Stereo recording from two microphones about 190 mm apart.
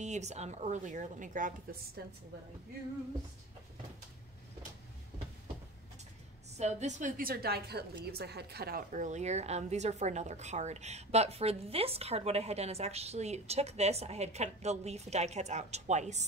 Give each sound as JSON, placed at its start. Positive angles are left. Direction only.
{"t": 0.0, "sound": "a woman's voice", "side_deg": -35}
{"t": 2.0, "sound": "a woman's voice", "side_deg": -55}
{"t": 6.5, "sound": "a woman's voice", "side_deg": -35}